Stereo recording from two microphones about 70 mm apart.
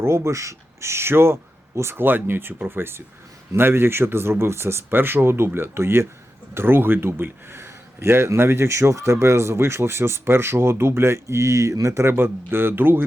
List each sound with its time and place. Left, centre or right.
0.0 s speech: right